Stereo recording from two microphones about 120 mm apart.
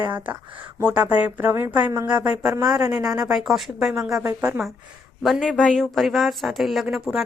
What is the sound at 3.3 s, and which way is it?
Speech, centre (ahead or behind).